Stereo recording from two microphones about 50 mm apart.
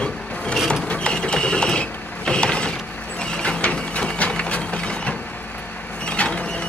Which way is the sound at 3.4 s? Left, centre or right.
Left.